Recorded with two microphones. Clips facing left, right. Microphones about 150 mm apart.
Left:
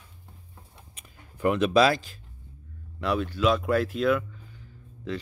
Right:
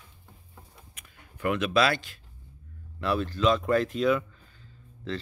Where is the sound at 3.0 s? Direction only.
10° left (ahead or behind).